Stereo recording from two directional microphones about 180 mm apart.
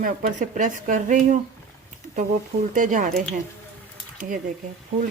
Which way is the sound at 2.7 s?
45° right (ahead or behind).